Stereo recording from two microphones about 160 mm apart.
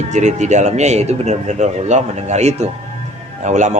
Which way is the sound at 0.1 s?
45° right (ahead or behind).